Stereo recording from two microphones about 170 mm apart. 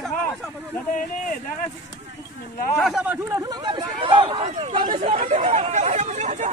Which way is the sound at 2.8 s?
5° right (ahead or behind).